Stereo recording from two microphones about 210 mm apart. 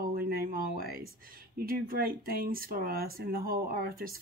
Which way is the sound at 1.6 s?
45° right (ahead or behind).